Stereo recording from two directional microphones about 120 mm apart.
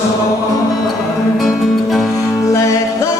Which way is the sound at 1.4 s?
Centre (ahead or behind).